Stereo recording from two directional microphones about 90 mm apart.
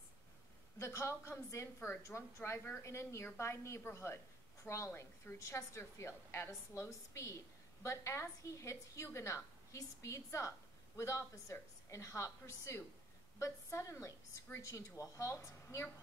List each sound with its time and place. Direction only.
0.7 s a woman's voice: 30° left (ahead or behind)